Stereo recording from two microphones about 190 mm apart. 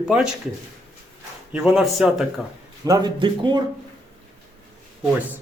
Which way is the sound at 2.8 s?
20° right (ahead or behind).